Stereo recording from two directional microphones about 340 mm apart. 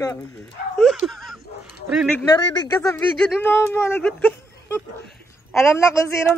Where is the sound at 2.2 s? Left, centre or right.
Centre.